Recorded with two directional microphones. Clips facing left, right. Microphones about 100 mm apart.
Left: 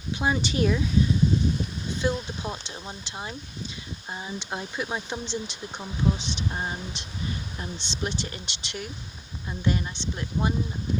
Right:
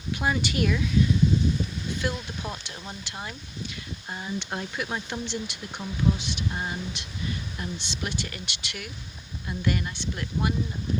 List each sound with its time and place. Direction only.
0.1 s speech: 20° left (ahead or behind)
2.0 s speech: 25° left (ahead or behind)